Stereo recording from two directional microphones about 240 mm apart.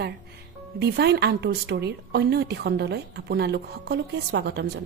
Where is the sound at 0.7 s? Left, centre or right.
Right.